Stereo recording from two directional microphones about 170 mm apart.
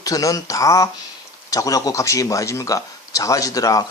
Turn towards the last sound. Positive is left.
turn(degrees=20)  # may be behind; listen again after turning